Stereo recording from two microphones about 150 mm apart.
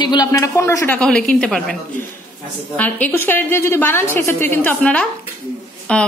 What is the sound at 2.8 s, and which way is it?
Speech, 10° left (ahead or behind).